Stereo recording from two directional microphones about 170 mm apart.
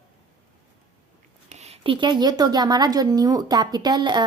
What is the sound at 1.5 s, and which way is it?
A woman's voice, 40° right (ahead or behind).